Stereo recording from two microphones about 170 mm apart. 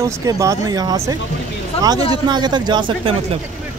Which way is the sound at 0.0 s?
20° right (ahead or behind).